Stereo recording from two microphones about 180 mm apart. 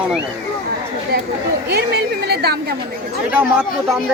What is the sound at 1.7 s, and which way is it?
Speech, 60° right (ahead or behind).